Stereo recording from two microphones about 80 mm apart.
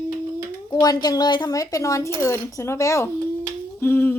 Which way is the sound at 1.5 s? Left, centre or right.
Left.